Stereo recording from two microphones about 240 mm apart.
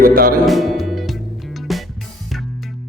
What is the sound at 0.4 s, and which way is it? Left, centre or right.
Music, centre.